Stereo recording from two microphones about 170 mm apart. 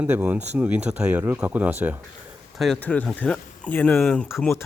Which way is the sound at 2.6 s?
5° left (ahead or behind).